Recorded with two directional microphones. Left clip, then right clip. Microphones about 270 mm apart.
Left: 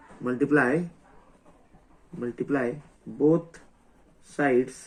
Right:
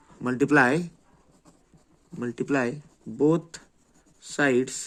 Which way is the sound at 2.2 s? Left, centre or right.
Right.